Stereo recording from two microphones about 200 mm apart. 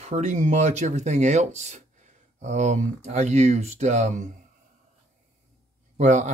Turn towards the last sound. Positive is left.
turn(degrees=-35)  # may be behind; listen again after turning